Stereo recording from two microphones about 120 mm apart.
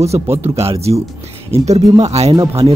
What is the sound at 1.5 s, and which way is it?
Speech, 65° right (ahead or behind).